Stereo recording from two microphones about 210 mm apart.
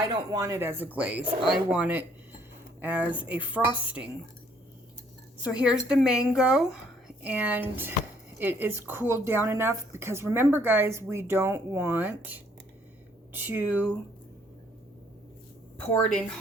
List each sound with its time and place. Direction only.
0.3 s speech: 15° right (ahead or behind)
1.2 s speech: 20° right (ahead or behind)
1.5 s speech: 5° right (ahead or behind)
5.4 s a woman's voice: 5° right (ahead or behind)
15.8 s a woman's voice: 5° left (ahead or behind)